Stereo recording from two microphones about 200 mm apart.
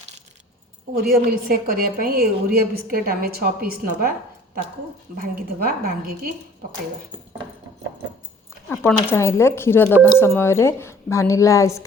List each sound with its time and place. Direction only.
1.3 s a woman's voice: 45° right (ahead or behind)
5.1 s a woman's voice: 45° right (ahead or behind)
8.7 s a woman's voice: 10° left (ahead or behind)